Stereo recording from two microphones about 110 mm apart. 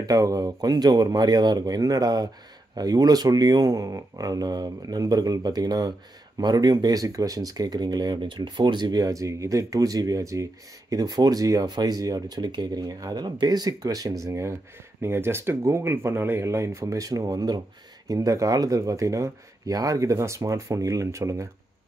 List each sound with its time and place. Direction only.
0.0 s speech: 35° right (ahead or behind)